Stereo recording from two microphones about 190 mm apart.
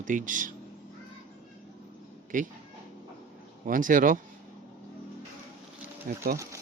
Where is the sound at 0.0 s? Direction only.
45° right (ahead or behind).